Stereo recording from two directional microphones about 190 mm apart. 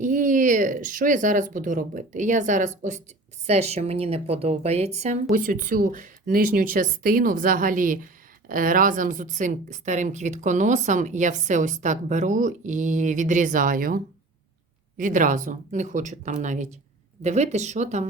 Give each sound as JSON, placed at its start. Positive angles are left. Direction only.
{"t": 0.0, "sound": "speech", "side_deg": -45}